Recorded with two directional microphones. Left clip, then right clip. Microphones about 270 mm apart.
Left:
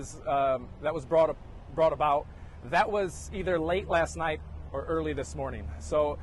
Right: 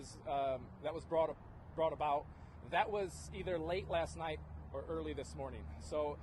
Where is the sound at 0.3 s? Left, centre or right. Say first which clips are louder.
Left 11 dB; left.